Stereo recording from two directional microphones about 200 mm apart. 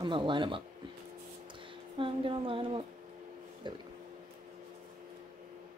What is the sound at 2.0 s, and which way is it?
Speech, 25° right (ahead or behind).